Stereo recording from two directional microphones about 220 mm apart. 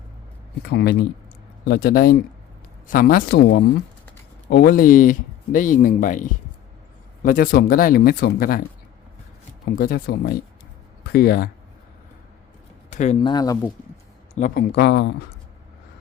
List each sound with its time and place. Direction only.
0.6 s speech: 50° left (ahead or behind)
9.7 s speech: 40° left (ahead or behind)
12.9 s speech: 30° left (ahead or behind); by 13.7 s 15° left (ahead or behind)
14.3 s speech: 40° left (ahead or behind)